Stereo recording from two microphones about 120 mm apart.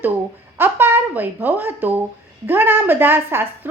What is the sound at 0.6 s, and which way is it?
A woman's voice, 15° right (ahead or behind).